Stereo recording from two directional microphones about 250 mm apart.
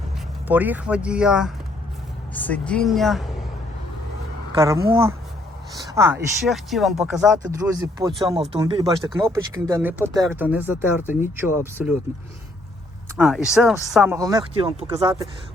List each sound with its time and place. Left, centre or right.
0.4 s speech: centre
4.5 s speech: centre
6.4 s speech: centre
7.6 s speech: centre
13.1 s speech: centre